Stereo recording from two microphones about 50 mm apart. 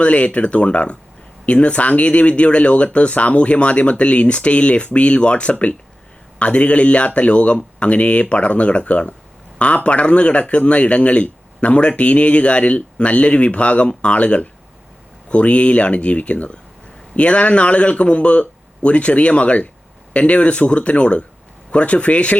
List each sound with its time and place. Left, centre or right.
0.0 s speech: left